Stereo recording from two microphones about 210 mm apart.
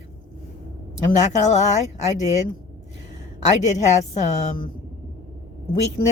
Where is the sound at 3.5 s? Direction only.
35° left (ahead or behind).